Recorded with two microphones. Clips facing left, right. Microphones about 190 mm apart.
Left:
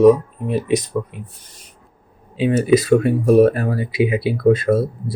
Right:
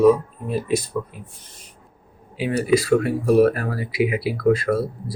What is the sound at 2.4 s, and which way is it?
Speech, 25° left (ahead or behind).